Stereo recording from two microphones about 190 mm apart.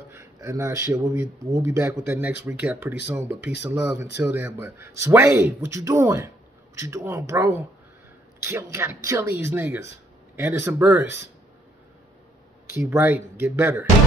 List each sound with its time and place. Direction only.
0.1 s speech: 15° right (ahead or behind)
12.7 s speech: 10° right (ahead or behind)